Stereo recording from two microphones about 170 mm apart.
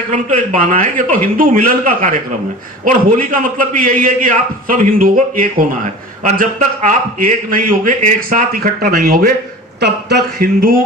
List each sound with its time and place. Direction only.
0.1 s a man's voice: 50° right (ahead or behind)
10.3 s a man's voice: 60° right (ahead or behind)